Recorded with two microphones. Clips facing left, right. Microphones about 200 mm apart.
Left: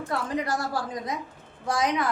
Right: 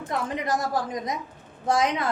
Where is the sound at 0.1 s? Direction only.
20° right (ahead or behind).